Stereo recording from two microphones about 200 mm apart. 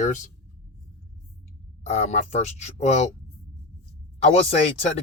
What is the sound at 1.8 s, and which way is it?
Speech, 35° left (ahead or behind).